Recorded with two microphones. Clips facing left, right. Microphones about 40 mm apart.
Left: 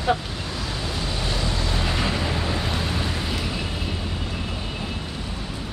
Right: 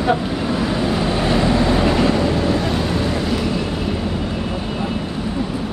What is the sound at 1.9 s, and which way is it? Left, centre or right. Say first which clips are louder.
Vehicle: right 9 dB; centre.